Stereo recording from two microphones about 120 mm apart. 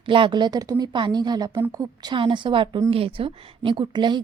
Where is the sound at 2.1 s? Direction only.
40° right (ahead or behind).